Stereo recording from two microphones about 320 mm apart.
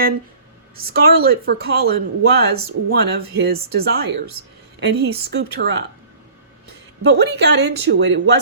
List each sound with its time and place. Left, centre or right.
0.8 s speech: right
7.0 s speech: right